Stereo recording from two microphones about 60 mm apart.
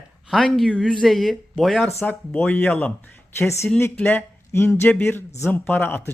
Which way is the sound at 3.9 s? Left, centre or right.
Left.